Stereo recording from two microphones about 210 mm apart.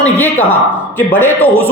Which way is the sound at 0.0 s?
10° left (ahead or behind).